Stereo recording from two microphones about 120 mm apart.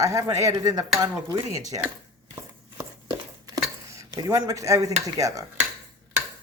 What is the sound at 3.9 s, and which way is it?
Speech, 30° right (ahead or behind).